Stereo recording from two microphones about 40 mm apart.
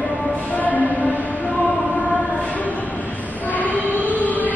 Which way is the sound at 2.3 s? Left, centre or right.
Left.